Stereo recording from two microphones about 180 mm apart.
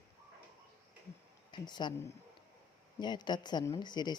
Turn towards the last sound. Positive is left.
turn(degrees=25)  # may be behind; listen again after turning